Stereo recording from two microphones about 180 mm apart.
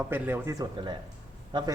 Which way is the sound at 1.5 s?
25° right (ahead or behind).